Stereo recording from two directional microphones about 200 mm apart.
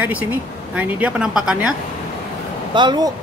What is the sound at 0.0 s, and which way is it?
Speech, 10° right (ahead or behind).